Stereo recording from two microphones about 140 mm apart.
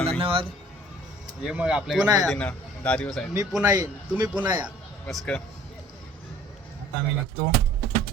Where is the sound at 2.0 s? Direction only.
25° right (ahead or behind).